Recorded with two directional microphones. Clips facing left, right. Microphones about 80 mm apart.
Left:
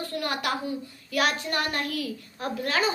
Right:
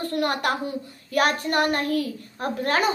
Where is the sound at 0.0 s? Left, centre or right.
Right.